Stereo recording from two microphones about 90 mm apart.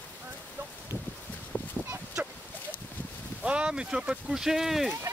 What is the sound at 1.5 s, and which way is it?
Fowl, 25° left (ahead or behind).